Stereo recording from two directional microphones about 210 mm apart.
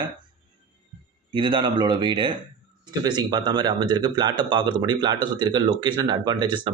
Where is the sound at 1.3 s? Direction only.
20° right (ahead or behind).